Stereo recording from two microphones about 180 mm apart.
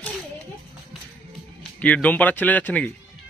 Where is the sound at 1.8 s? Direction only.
10° left (ahead or behind).